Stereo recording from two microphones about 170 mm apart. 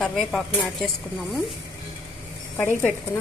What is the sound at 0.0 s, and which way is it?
Speech, centre (ahead or behind).